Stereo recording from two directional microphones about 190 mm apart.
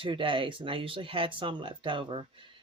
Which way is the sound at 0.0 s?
25° right (ahead or behind).